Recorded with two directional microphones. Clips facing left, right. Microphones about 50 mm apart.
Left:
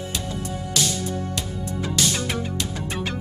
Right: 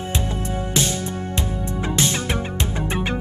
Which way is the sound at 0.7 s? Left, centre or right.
Right.